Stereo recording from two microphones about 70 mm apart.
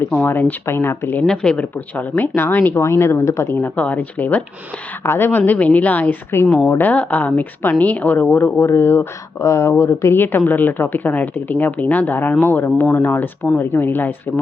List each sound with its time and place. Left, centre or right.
0.2 s speech: left
1.3 s speech: centre; by 3.5 s left
3.5 s speech: left
5.0 s speech: left
5.5 s speech: left